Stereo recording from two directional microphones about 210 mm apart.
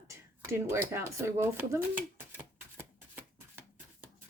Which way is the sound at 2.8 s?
10° right (ahead or behind).